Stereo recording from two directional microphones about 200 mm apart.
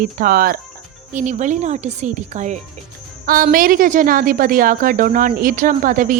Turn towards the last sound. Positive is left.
turn(degrees=-40)  # may be behind; listen again after turning